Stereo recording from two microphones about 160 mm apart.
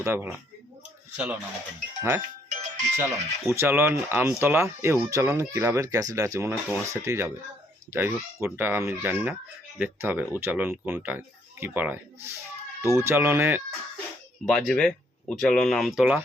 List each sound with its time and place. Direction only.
0.0 s speech: 15° right (ahead or behind)
2.5 s music: 50° right (ahead or behind)
3.5 s speech: 15° right (ahead or behind)
14.4 s speech: centre (ahead or behind)